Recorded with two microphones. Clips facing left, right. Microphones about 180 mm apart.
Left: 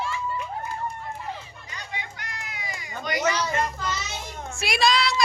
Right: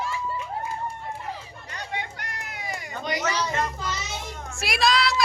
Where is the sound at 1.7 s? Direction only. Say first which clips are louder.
Right 4 dB; 60° right (ahead or behind).